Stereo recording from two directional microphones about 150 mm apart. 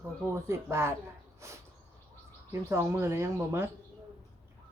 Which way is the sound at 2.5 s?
20° right (ahead or behind).